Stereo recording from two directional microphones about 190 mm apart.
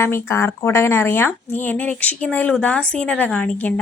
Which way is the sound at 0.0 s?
15° left (ahead or behind).